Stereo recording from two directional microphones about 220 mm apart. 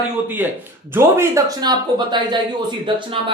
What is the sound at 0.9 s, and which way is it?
Speech, 10° right (ahead or behind).